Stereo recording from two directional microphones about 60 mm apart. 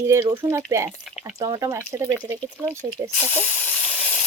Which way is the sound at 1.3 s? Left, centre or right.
Right.